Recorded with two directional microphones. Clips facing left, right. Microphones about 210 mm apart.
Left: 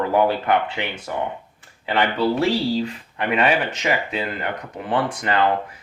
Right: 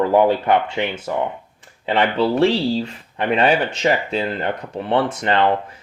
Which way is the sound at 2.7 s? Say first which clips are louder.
Right 1 dB; 30° right (ahead or behind).